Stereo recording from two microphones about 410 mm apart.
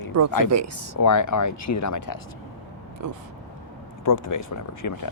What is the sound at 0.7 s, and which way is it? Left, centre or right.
Speech, right.